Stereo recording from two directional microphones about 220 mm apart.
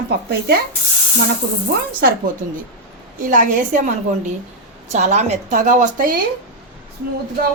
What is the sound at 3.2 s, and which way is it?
A woman's voice, 35° right (ahead or behind).